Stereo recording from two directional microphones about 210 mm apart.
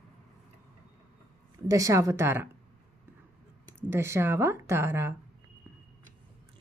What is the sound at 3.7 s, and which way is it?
Speech, 10° right (ahead or behind).